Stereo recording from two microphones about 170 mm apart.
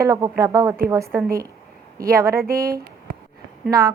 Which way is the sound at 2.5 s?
60° right (ahead or behind).